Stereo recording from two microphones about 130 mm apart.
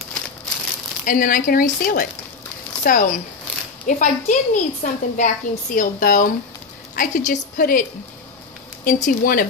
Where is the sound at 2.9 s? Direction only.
80° left.